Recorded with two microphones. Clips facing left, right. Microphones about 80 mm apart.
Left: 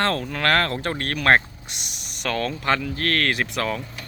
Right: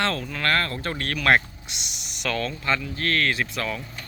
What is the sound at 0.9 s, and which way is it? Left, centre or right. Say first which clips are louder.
Speech: left 2 dB; left.